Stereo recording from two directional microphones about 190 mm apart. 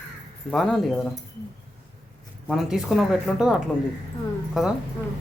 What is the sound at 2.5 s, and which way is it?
Speech, centre (ahead or behind).